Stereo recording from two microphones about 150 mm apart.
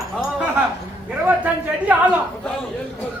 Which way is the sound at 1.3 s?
10° right (ahead or behind).